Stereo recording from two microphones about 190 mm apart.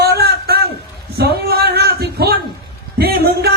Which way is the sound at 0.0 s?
55° right (ahead or behind).